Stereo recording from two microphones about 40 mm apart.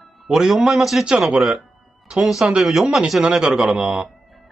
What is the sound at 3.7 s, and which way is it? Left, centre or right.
Speech, centre.